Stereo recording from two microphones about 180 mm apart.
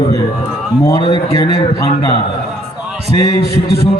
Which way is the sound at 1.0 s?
30° left (ahead or behind).